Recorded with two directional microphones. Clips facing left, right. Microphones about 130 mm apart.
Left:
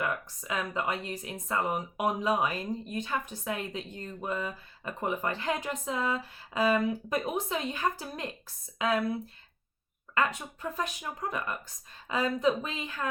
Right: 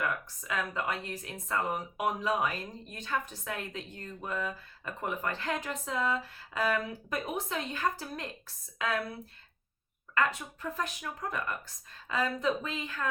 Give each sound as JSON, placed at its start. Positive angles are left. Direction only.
{"t": 0.0, "sound": "a woman's voice", "side_deg": 20}
{"t": 10.2, "sound": "speech", "side_deg": 20}